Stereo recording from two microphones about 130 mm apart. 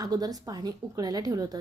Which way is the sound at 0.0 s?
30° right (ahead or behind).